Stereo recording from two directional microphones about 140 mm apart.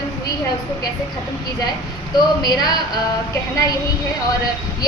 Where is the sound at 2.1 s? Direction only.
30° left (ahead or behind).